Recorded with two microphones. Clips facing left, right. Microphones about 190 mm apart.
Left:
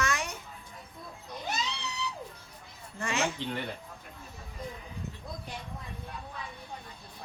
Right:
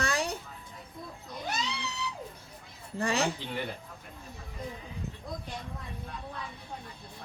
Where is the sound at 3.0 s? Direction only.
35° right (ahead or behind).